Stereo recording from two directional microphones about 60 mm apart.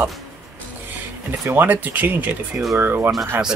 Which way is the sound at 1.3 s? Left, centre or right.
Right.